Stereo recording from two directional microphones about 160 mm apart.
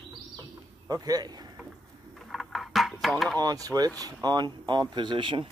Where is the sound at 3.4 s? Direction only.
25° right (ahead or behind).